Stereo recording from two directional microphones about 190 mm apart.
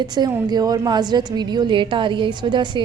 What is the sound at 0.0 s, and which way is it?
A woman's voice, 20° right (ahead or behind).